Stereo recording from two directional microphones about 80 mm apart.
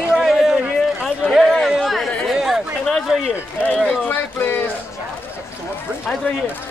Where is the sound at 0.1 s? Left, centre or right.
Centre.